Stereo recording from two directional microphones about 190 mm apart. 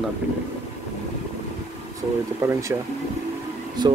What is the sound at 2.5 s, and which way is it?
Speech, 15° right (ahead or behind).